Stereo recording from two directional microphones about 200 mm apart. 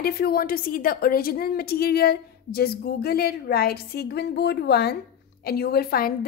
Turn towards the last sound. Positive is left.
turn(degrees=50)  # may be behind; listen again after turning